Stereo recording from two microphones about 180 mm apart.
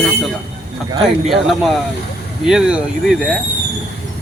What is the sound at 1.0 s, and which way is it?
Speech, centre (ahead or behind).